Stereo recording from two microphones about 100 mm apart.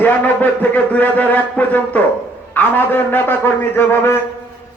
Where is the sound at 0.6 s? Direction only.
15° left (ahead or behind).